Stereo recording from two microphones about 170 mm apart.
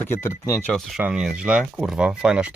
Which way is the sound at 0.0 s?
15° left (ahead or behind).